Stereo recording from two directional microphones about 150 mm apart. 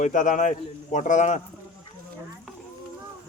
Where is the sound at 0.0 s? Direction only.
55° left (ahead or behind).